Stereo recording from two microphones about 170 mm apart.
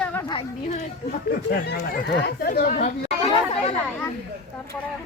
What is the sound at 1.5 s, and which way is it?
Speech, 70° left (ahead or behind).